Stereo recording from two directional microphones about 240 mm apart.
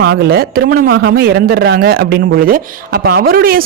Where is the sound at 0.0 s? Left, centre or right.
Right.